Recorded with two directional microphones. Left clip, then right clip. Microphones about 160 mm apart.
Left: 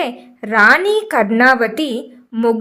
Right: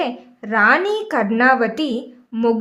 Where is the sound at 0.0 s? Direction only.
25° left (ahead or behind).